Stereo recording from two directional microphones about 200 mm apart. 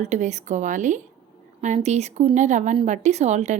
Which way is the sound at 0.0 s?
35° right (ahead or behind).